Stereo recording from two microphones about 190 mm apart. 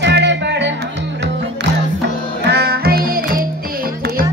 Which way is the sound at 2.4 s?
55° right (ahead or behind).